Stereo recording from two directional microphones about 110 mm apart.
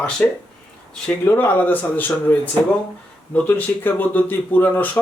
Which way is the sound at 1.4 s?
20° left (ahead or behind).